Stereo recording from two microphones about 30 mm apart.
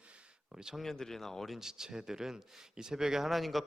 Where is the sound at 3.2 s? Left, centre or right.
Centre.